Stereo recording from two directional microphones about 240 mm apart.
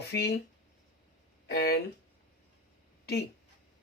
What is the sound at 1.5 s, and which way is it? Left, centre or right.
Speech, left.